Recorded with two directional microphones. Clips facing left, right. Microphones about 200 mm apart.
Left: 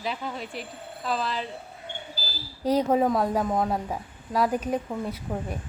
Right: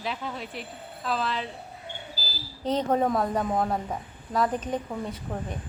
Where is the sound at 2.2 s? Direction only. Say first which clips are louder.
Left 2 dB; 40° right (ahead or behind).